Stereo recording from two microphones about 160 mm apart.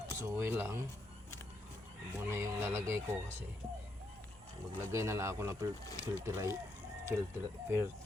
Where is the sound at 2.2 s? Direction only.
15° right (ahead or behind).